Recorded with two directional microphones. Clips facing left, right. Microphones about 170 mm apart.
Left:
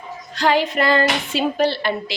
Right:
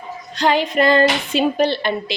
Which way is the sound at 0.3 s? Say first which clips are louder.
Right 1 dB; 20° right (ahead or behind).